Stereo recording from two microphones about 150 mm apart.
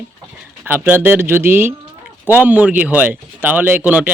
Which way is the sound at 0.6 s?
15° right (ahead or behind).